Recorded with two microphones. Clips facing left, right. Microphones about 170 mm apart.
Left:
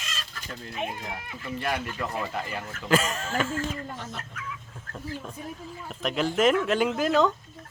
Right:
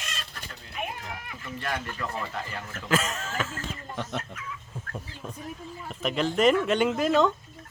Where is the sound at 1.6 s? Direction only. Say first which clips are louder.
Left 2 dB; 10° left (ahead or behind).